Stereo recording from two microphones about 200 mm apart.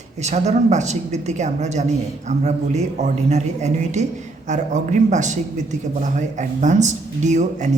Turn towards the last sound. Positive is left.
turn(degrees=-35)  # may be behind; listen again after turning